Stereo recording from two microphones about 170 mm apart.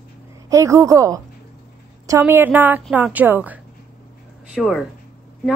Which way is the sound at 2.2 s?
10° right (ahead or behind).